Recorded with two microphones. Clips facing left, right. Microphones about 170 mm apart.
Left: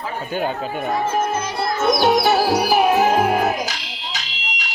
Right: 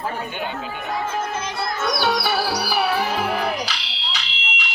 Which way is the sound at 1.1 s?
25° left (ahead or behind).